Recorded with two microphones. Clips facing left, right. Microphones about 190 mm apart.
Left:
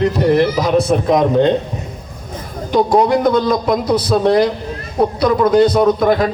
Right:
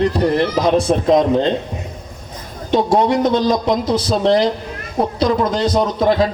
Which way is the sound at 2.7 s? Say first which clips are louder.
Left 2 dB; 25° right (ahead or behind).